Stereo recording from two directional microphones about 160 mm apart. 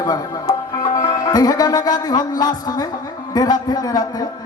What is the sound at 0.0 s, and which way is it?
Speech, 20° left (ahead or behind).